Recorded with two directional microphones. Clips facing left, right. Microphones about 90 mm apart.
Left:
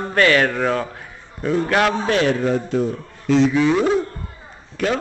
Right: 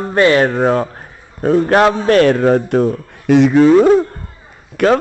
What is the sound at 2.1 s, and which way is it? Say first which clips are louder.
Speech: right 8 dB; 55° right (ahead or behind).